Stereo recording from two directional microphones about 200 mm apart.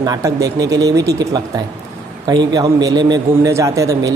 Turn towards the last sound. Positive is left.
turn(degrees=-15)  # may be behind; listen again after turning